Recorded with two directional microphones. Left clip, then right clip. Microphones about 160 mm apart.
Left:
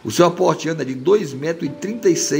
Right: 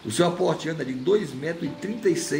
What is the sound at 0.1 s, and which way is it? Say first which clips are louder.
Speech: left 7 dB; 50° left (ahead or behind).